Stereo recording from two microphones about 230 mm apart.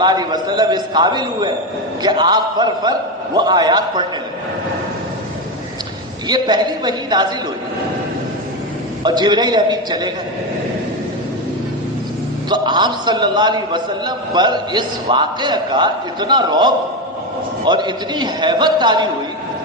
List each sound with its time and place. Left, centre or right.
0.0 s a man's voice: centre
6.2 s a man's voice: centre
9.0 s a man's voice: centre
12.5 s a man's voice: centre